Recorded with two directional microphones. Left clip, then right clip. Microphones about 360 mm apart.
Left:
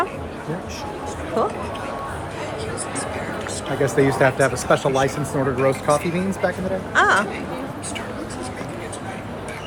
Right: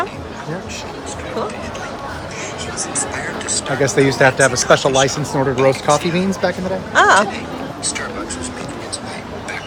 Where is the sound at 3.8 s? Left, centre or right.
Right.